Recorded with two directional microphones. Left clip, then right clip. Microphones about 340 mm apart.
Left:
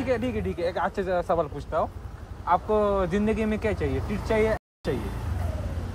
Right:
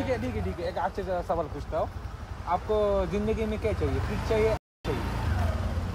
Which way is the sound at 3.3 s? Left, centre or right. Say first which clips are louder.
Left 3 dB; left.